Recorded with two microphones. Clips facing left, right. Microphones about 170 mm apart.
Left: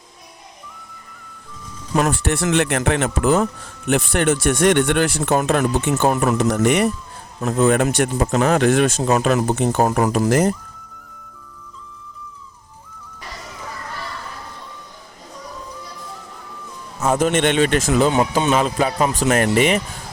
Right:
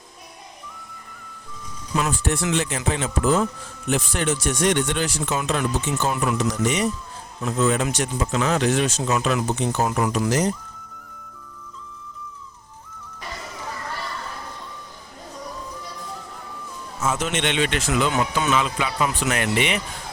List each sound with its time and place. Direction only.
2.0 s speech: 65° left (ahead or behind)
17.0 s speech: 55° left (ahead or behind)
18.1 s speech: 30° left (ahead or behind)